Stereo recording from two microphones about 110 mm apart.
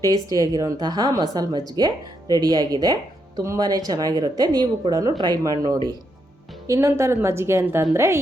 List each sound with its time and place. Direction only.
0.0 s a woman's voice: 30° right (ahead or behind)